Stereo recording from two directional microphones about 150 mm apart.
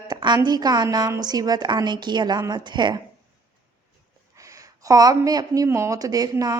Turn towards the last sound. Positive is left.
turn(degrees=-25)  # may be behind; listen again after turning